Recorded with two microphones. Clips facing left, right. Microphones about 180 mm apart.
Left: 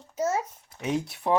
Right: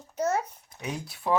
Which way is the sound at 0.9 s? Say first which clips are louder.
Left 3 dB; 25° left (ahead or behind).